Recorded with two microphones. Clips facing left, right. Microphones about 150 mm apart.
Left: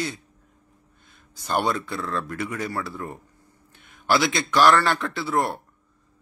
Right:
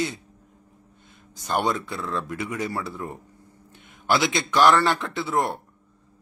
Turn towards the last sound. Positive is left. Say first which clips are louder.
# even
turn(degrees=-20)  # may be behind; listen again after turning